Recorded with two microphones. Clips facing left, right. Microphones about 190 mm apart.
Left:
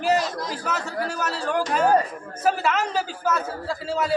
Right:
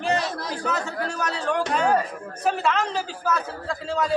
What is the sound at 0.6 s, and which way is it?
A man's voice, 5° left (ahead or behind).